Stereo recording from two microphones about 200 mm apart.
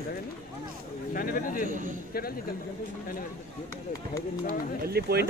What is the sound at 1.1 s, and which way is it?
Speech, 45° left (ahead or behind).